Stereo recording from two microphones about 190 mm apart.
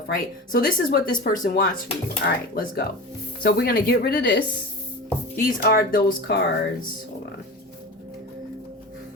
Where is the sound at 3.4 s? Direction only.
50° left (ahead or behind).